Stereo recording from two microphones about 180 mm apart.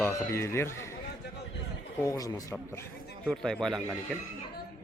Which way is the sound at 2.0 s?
20° left (ahead or behind).